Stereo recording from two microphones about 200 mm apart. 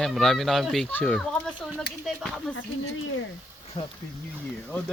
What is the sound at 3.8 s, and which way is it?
Speech, 20° left (ahead or behind).